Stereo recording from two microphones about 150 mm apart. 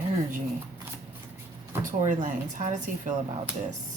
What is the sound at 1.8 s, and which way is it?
A woman's voice, 55° right (ahead or behind).